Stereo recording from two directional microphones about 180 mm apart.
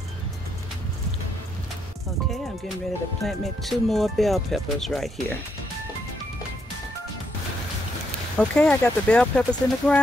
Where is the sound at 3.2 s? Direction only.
Centre (ahead or behind).